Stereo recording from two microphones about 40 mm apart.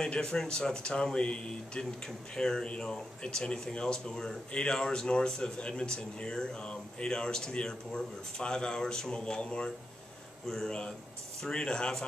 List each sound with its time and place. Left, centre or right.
0.0 s a man's voice: centre